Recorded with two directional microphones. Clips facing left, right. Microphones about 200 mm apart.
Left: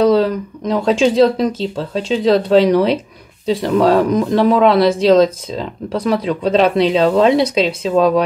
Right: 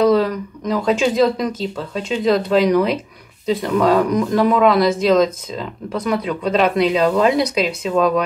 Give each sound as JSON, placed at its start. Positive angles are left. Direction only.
{"t": 0.0, "sound": "speech", "side_deg": 30}